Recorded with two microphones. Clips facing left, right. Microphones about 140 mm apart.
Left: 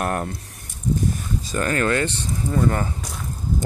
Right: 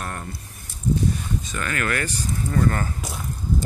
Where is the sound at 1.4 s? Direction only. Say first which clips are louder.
Left 8 dB; 35° left (ahead or behind).